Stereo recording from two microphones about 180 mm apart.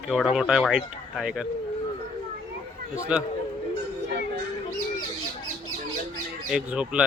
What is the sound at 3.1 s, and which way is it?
Speech, 5° right (ahead or behind).